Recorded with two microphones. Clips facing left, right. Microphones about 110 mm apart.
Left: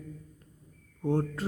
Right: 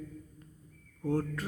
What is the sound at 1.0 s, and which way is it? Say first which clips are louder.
Mantra: left 3 dB; 30° left (ahead or behind).